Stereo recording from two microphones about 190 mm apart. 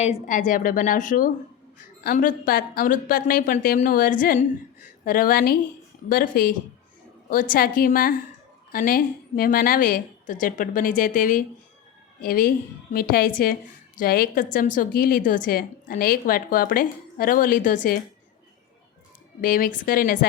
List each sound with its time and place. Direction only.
0.0 s a woman's voice: 40° left (ahead or behind)
19.4 s a woman's voice: 45° left (ahead or behind)